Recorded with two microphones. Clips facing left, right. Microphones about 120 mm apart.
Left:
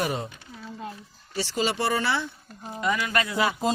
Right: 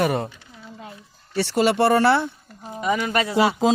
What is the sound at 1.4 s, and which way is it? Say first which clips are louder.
Speech: right 8 dB; 60° right (ahead or behind).